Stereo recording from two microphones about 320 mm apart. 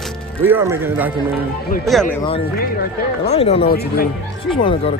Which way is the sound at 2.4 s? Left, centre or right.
Left.